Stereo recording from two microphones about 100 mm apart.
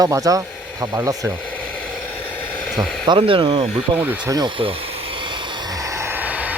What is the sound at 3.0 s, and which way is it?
Speech, 60° right (ahead or behind).